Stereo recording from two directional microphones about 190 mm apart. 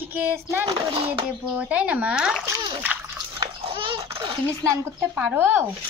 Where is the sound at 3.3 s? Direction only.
25° right (ahead or behind).